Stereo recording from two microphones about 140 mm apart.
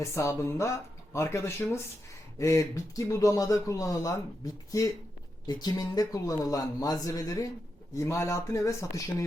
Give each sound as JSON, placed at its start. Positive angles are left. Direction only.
{"t": 0.0, "sound": "a man's voice", "side_deg": 20}
{"t": 5.5, "sound": "a man's voice", "side_deg": 30}